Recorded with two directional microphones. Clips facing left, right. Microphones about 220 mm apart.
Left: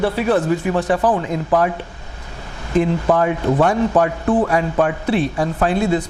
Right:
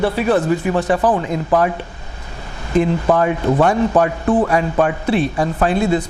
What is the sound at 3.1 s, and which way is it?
A man's voice, 25° right (ahead or behind).